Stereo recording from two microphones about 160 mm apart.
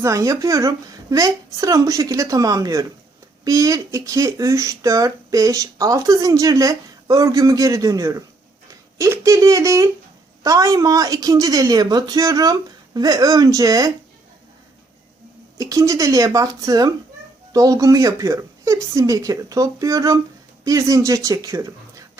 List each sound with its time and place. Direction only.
0.0 s speech: 20° right (ahead or behind)
15.5 s speech: 20° right (ahead or behind)